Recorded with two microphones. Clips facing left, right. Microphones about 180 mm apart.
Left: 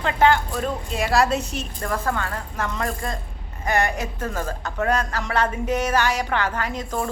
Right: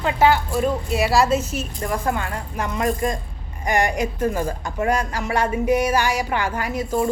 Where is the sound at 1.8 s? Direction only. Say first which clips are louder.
Right 1 dB; 15° right (ahead or behind).